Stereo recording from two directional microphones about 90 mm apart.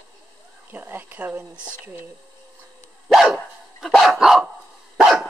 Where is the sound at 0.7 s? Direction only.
20° right (ahead or behind).